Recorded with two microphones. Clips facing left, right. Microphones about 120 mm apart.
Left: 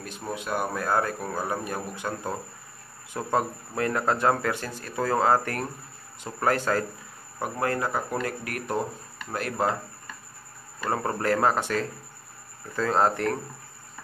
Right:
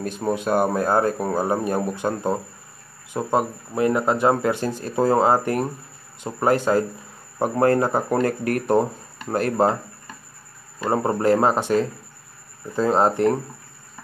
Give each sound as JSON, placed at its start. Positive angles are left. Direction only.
{"t": 0.0, "sound": "speech", "side_deg": -45}
{"t": 7.3, "sound": "speech", "side_deg": -35}
{"t": 10.8, "sound": "speech", "side_deg": -25}